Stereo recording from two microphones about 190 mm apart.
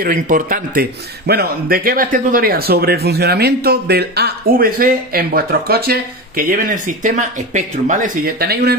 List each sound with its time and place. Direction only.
0.0 s a man's voice: 45° right (ahead or behind)